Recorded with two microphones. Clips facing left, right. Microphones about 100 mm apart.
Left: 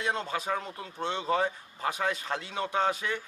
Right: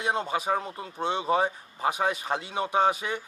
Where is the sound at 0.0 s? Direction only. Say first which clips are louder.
Right 4 dB; 15° right (ahead or behind).